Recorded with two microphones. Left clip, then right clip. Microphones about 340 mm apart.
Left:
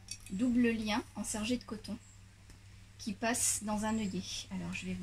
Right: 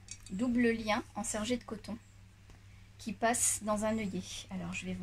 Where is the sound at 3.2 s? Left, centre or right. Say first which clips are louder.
Right 3 dB; right.